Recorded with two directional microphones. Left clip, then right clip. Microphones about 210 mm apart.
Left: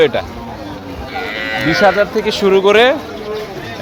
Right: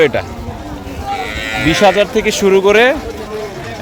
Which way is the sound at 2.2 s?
10° right (ahead or behind).